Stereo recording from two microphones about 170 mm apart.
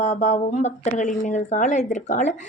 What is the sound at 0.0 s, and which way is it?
A woman's voice, 40° left (ahead or behind).